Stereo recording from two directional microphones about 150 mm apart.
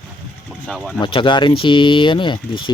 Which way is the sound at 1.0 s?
35° left (ahead or behind).